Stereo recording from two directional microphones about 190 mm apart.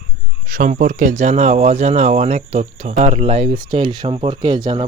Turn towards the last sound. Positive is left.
turn(degrees=-25)  # may be behind; listen again after turning